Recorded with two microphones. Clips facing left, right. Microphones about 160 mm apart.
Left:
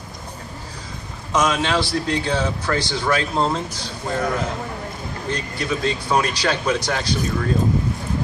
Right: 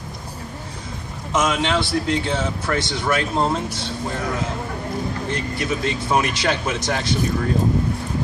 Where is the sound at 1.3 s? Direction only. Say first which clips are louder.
Left 1 dB; 25° right (ahead or behind).